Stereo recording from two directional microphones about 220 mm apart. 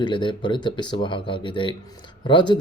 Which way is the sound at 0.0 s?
20° left (ahead or behind).